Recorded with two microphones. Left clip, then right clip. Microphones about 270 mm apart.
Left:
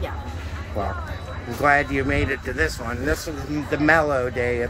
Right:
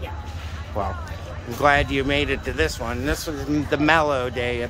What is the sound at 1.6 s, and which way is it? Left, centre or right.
Speech, centre.